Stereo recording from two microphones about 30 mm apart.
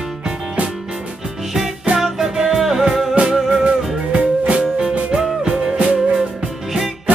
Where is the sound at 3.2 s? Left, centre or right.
Right.